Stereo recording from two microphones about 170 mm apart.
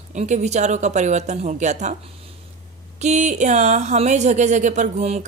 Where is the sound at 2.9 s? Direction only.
40° right (ahead or behind).